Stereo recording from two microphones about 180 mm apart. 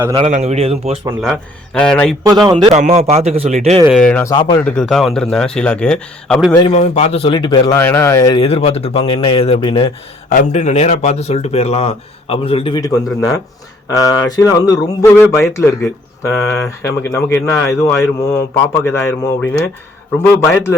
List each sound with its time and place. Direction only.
0.3 s speech: 40° right (ahead or behind)
1.2 s a man's voice: 5° left (ahead or behind)
2.2 s speech: 20° right (ahead or behind)
2.7 s speech: 40° right (ahead or behind)
3.9 s a man's voice: 5° left (ahead or behind)
4.4 s a man's voice: 25° left (ahead or behind)
4.6 s a man's voice: 5° left (ahead or behind)
6.7 s a man's voice: 40° left (ahead or behind); by 8.4 s 15° left (ahead or behind)
8.4 s a man's voice: 35° left (ahead or behind)
10.2 s a man's voice: 45° left (ahead or behind); by 13.0 s 20° left (ahead or behind)
13.1 s a man's voice: centre (ahead or behind)
13.9 s a man's voice: 20° left (ahead or behind)
16.8 s a man's voice: 15° left (ahead or behind)